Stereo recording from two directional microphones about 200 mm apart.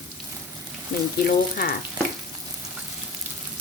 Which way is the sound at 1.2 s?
50° left (ahead or behind).